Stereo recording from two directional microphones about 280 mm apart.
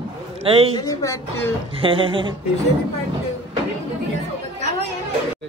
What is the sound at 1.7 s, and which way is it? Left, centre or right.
Speech, centre.